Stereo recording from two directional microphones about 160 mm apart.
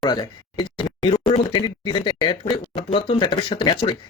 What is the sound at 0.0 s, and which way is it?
Speech, 25° left (ahead or behind).